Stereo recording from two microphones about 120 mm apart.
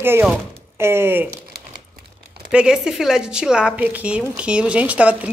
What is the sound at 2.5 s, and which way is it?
A woman's voice, 5° right (ahead or behind).